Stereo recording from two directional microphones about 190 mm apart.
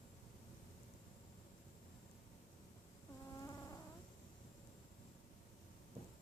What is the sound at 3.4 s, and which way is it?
Insect, 15° left (ahead or behind).